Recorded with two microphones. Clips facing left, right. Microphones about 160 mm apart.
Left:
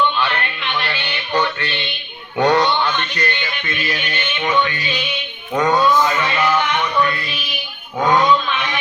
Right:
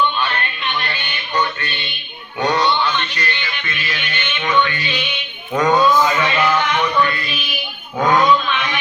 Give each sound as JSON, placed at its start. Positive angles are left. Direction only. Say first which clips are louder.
{"t": 0.2, "sound": "music", "louder": "left 1 dB", "side_deg": 70}
{"t": 2.4, "sound": "a sound", "louder": "left 2 dB", "side_deg": 55}
{"t": 4.4, "sound": "music", "louder": "right 1 dB", "side_deg": 30}
{"t": 5.5, "sound": "speech", "louder": "right 1 dB", "side_deg": 0}